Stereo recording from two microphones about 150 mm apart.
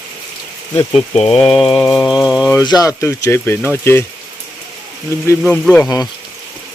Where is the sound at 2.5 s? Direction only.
25° left (ahead or behind).